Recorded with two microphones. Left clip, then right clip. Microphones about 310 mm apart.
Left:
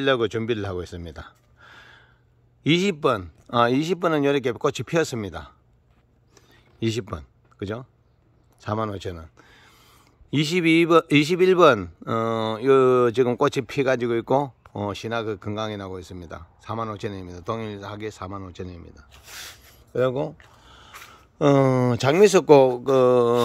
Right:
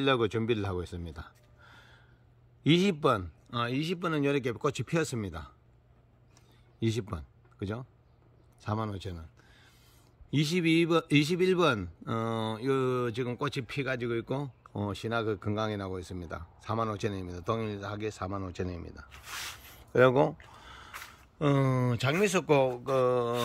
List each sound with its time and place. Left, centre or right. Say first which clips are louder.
0.0 s speech: left 6 dB; centre
3.5 s speech: left 12 dB; centre
6.3 s a sound: left 10 dB; centre
8.5 s speech: left 8 dB; centre
20.6 s a sound: even; centre
21.4 s speech: left 11 dB; centre
22.8 s mantra: left 10 dB; left